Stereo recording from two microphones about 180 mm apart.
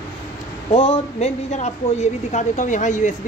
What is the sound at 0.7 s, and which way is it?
A woman's voice, 30° left (ahead or behind).